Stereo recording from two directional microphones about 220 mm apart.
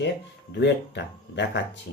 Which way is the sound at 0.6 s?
50° left (ahead or behind).